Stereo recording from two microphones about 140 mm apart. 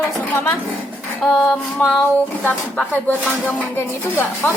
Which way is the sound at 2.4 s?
10° left (ahead or behind).